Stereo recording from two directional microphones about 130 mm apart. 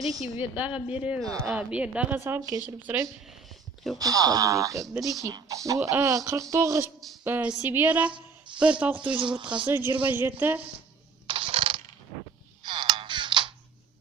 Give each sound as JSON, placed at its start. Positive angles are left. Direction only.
{"t": 0.0, "sound": "a woman's voice", "side_deg": 0}
{"t": 0.3, "sound": "speech", "side_deg": -10}
{"t": 3.9, "sound": "speech", "side_deg": -30}
{"t": 4.9, "sound": "a woman's voice", "side_deg": 0}
{"t": 5.2, "sound": "speech", "side_deg": -25}
{"t": 8.5, "sound": "speech", "side_deg": -40}
{"t": 9.6, "sound": "speech", "side_deg": -15}
{"t": 11.3, "sound": "coin", "side_deg": -45}
{"t": 12.6, "sound": "music", "side_deg": -35}